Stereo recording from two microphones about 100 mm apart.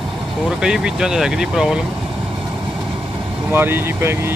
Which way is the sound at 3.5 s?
20° right (ahead or behind).